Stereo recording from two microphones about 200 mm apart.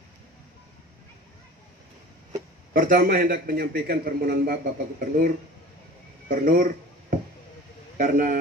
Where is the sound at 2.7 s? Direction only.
45° right (ahead or behind).